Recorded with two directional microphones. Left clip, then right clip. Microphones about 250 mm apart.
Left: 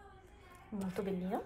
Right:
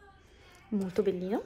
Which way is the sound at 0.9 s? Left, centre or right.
Right.